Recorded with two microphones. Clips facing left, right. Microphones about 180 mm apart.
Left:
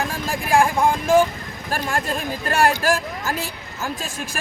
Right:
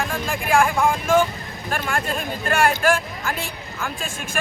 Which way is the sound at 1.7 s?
35° left (ahead or behind).